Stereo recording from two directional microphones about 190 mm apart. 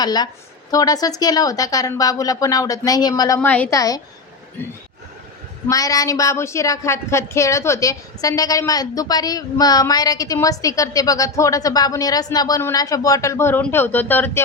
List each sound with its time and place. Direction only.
0.0 s speech: 20° left (ahead or behind)
5.6 s speech: 20° left (ahead or behind)